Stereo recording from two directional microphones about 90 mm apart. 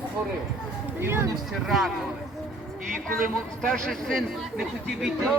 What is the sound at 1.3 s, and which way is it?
Speech, centre (ahead or behind).